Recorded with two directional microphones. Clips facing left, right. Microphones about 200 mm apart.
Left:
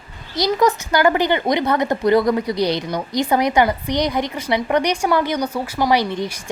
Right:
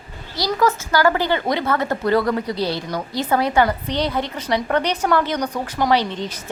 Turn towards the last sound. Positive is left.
turn(degrees=10)  # may be behind; listen again after turning